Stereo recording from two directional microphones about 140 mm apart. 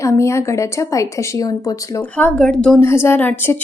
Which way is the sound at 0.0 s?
20° left (ahead or behind).